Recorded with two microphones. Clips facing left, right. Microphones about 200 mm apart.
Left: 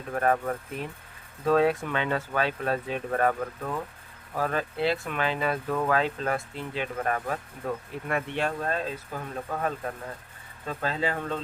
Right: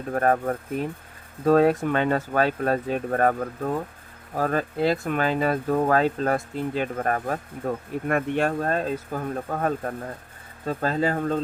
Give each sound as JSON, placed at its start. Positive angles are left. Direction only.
{"t": 0.1, "sound": "speech", "side_deg": -45}